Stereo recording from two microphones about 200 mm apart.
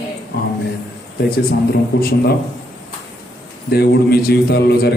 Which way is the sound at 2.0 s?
50° left (ahead or behind).